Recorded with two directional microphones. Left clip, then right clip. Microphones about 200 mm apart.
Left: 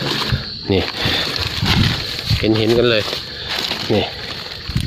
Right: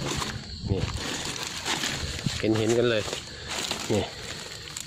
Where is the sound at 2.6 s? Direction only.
5° left (ahead or behind).